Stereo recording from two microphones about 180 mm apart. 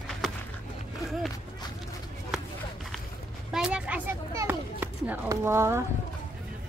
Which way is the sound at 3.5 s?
5° right (ahead or behind).